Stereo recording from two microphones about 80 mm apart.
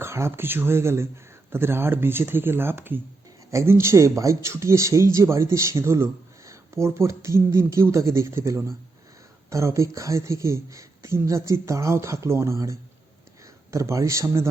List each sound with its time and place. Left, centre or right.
0.0 s speech: right